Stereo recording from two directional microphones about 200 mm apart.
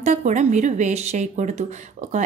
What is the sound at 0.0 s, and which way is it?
A woman's voice, 35° right (ahead or behind).